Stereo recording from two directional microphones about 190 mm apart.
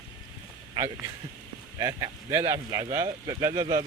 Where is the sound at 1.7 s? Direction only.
15° right (ahead or behind).